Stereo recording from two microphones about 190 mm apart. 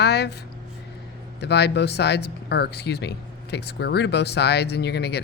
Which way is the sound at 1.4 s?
60° left (ahead or behind).